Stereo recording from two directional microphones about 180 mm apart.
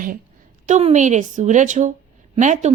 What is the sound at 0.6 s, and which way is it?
A woman's voice, 40° right (ahead or behind).